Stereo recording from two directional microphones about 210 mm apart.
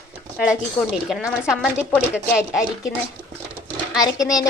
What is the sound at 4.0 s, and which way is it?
Speech, 15° left (ahead or behind).